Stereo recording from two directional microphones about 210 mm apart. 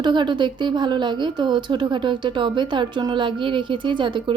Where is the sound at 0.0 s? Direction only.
20° right (ahead or behind).